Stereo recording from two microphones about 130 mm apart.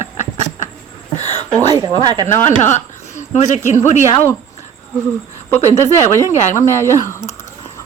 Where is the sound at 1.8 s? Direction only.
30° right (ahead or behind).